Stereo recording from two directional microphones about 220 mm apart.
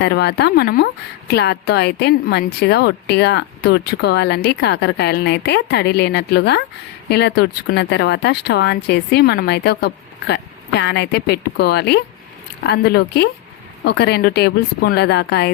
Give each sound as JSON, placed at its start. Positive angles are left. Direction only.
{"t": 0.0, "sound": "a woman's voice", "side_deg": 50}